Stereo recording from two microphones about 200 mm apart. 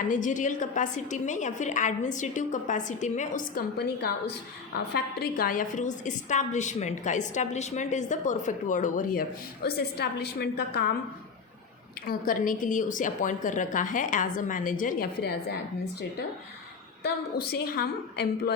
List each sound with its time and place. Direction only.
0.1 s a woman's voice: 40° left (ahead or behind)
9.6 s a woman's voice: 55° left (ahead or behind)
12.0 s a woman's voice: 45° left (ahead or behind)
17.5 s a woman's voice: 50° left (ahead or behind)